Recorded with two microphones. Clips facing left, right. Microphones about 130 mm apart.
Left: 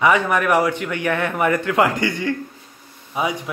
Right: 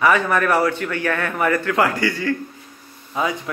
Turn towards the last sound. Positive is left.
turn(degrees=15)  # may be behind; listen again after turning